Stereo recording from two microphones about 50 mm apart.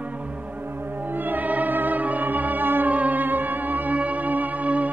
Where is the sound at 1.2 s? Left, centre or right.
Right.